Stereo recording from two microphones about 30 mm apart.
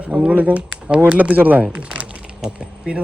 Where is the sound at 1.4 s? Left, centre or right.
Right.